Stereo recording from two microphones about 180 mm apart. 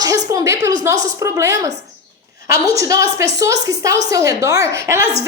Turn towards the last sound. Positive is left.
turn(degrees=-15)  # may be behind; listen again after turning